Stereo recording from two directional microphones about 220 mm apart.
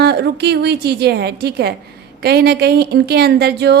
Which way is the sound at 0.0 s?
50° right (ahead or behind).